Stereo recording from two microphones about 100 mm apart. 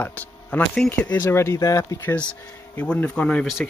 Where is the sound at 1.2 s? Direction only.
30° left (ahead or behind).